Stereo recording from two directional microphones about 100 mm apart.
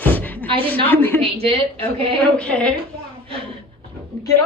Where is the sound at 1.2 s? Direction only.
65° right (ahead or behind).